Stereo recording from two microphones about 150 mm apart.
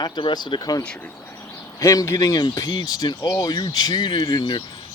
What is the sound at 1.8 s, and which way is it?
Speech, 20° left (ahead or behind).